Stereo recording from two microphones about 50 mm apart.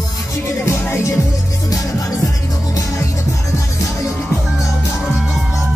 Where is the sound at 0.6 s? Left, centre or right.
Left.